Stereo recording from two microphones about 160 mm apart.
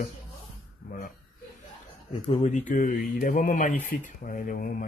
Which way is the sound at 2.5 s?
50° left (ahead or behind).